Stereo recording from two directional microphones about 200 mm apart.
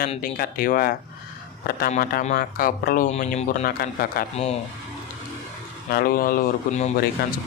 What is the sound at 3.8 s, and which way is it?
Speech, 45° left (ahead or behind).